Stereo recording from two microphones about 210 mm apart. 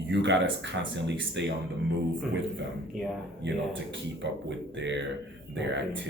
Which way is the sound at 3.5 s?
60° right (ahead or behind).